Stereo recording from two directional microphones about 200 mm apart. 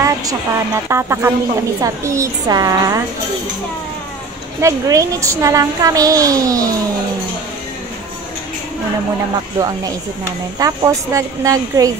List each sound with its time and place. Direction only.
0.0 s a sound: 15° right (ahead or behind)
0.8 s a child's voice: 15° right (ahead or behind)
4.6 s a child's voice: 15° right (ahead or behind)
9.6 s a child's voice: 15° right (ahead or behind)